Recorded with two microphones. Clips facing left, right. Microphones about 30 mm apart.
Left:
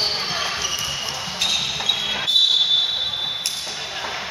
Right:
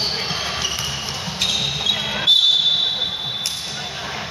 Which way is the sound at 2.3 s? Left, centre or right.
Right.